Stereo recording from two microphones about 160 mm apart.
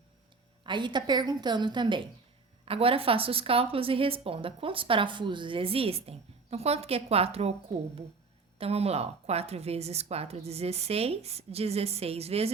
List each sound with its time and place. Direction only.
0.6 s a woman's voice: 30° right (ahead or behind)